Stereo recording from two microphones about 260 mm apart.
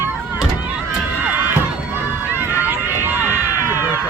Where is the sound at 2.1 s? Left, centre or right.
Centre.